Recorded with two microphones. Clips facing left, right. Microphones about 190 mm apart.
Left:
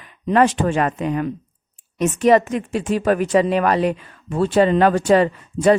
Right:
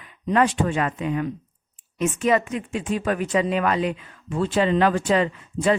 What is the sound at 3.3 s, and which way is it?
Speech, 45° left (ahead or behind).